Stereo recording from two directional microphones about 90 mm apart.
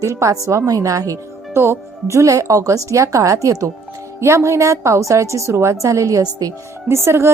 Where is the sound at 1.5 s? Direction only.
25° right (ahead or behind).